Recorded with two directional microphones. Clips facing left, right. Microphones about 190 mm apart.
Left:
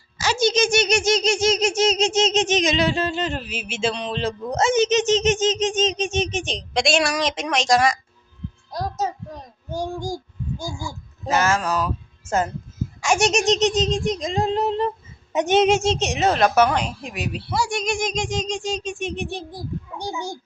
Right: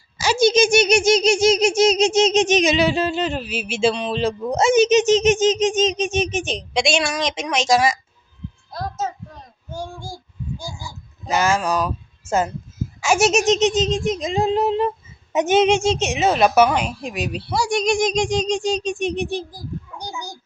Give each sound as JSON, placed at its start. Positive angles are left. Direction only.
{"t": 0.2, "sound": "a child's voice", "side_deg": -10}
{"t": 6.1, "sound": "a sound", "side_deg": -10}
{"t": 9.8, "sound": "a child's voice", "side_deg": 40}
{"t": 11.3, "sound": "a child's voice", "side_deg": -10}
{"t": 13.0, "sound": "a sound", "side_deg": -5}
{"t": 17.2, "sound": "a child's voice", "side_deg": -15}
{"t": 19.5, "sound": "a child's voice", "side_deg": 25}